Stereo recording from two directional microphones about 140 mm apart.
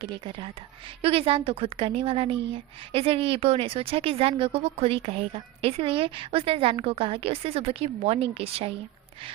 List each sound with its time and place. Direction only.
0.0 s a woman's voice: 35° right (ahead or behind)